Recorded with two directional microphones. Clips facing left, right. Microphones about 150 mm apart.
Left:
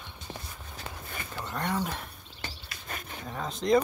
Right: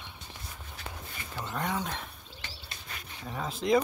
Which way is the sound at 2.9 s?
50° left (ahead or behind).